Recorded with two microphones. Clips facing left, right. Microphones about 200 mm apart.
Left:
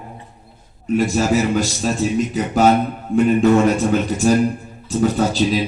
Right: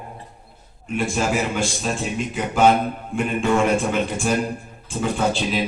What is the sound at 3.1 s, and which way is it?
Speech, 40° left (ahead or behind).